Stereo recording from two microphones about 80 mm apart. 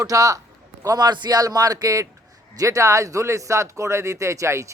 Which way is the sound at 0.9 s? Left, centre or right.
Right.